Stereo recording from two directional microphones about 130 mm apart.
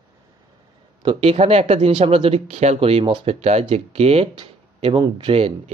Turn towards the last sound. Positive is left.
turn(degrees=-45)  # may be behind; listen again after turning